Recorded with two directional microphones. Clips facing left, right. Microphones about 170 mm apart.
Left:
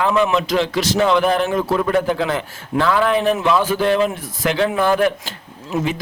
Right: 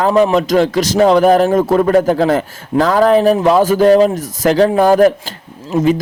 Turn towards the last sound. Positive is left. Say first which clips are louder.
# right 8 dB
turn(degrees=-40)  # may be behind; listen again after turning